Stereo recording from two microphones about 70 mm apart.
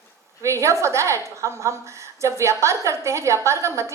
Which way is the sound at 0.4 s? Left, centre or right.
Right.